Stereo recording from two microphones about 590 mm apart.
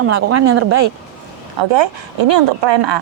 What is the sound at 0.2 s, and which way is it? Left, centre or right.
Speech, right.